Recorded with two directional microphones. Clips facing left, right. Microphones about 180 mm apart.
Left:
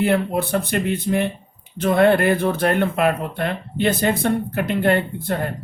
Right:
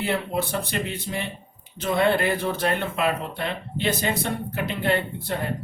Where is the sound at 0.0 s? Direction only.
55° left (ahead or behind).